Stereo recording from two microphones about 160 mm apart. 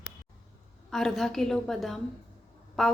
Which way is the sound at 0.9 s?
Centre (ahead or behind).